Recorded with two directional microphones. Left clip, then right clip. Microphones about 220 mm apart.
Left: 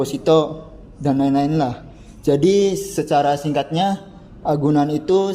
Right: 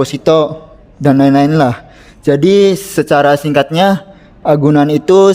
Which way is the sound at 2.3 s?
35° right (ahead or behind).